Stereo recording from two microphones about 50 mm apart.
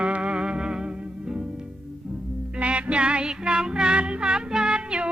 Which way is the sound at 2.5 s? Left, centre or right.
Right.